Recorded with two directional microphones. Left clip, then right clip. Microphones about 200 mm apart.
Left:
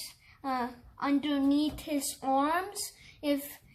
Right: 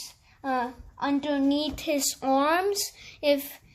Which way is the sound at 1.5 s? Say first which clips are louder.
Right 4 dB; 35° right (ahead or behind).